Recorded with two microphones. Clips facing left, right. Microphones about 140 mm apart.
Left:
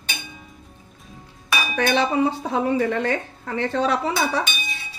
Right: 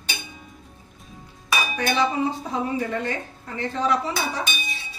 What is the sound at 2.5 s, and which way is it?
Speech, 70° left (ahead or behind).